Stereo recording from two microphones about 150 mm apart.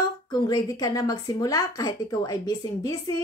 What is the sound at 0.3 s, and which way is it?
Speech, 25° left (ahead or behind).